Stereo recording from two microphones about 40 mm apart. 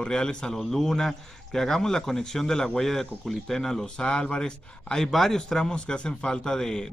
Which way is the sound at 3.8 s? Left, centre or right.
Left.